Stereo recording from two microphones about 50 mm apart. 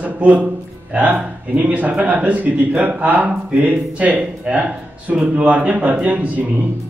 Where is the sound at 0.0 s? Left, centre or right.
Right.